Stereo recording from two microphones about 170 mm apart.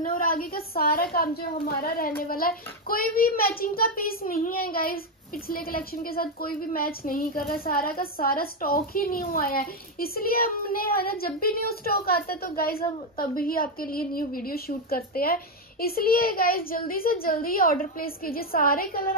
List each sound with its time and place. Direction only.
0.0 s a child's voice: 55° left (ahead or behind)